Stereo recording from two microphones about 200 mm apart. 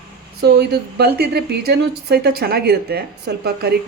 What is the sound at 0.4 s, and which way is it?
Speech, 55° right (ahead or behind).